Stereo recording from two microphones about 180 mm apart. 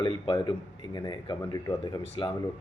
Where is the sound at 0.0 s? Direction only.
25° left (ahead or behind).